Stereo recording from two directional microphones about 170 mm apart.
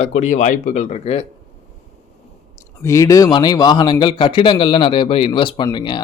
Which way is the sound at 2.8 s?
15° left (ahead or behind).